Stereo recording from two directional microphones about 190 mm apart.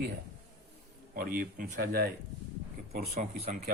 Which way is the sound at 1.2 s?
50° right (ahead or behind).